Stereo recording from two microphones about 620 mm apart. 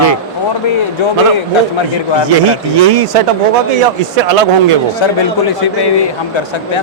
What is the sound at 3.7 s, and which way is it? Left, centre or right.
Speech, right.